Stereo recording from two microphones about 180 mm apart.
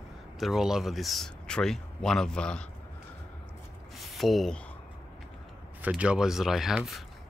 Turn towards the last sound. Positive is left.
turn(degrees=0)  # may be behind; listen again after turning